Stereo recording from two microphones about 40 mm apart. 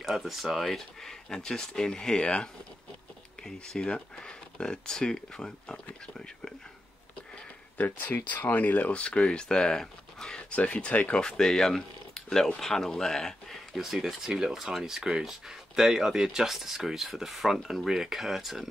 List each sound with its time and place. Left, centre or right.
0.0 s speech: centre
0.7 s speech: centre
3.5 s speech: left
7.7 s speech: left
8.9 s speech: left
10.5 s speech: left
11.1 s speech: centre
13.7 s speech: centre